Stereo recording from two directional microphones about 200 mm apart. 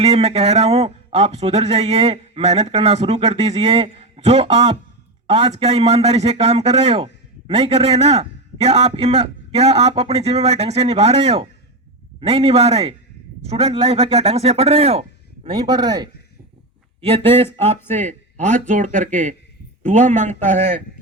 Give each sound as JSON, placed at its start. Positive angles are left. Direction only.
{"t": 0.0, "sound": "a man's voice", "side_deg": -30}
{"t": 17.9, "sound": "a man's voice", "side_deg": -40}